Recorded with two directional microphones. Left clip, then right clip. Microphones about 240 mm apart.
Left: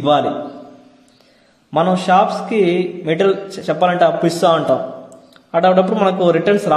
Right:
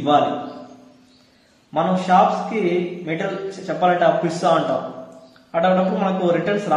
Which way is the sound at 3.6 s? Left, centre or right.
Left.